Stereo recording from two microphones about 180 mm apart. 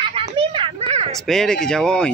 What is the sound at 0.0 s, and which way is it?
Children playing, 30° right (ahead or behind).